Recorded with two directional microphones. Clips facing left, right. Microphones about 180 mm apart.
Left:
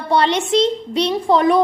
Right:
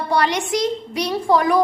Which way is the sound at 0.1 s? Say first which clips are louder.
Left 4 dB; 25° left (ahead or behind).